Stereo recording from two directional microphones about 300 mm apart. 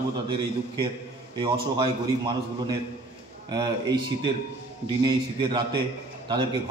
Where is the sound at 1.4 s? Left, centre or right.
Centre.